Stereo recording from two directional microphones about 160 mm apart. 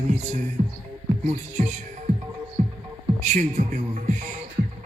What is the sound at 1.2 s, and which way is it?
Speech, 45° right (ahead or behind).